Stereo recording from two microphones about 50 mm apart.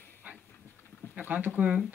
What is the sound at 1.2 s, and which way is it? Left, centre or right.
Speech, right.